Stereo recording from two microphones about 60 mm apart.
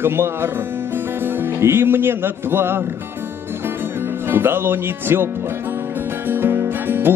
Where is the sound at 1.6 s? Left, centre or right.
Right.